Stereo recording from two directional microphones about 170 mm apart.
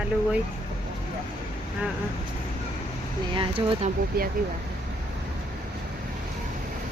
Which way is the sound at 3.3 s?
30° right (ahead or behind).